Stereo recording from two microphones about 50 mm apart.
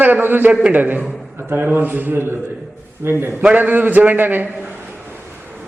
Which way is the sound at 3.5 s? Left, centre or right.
Right.